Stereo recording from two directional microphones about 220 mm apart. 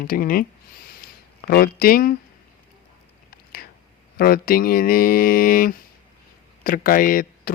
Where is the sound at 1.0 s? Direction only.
40° left (ahead or behind).